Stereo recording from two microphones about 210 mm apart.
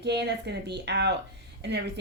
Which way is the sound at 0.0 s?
55° right (ahead or behind).